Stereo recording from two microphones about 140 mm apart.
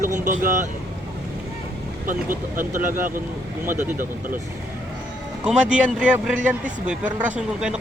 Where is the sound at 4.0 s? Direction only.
80° right.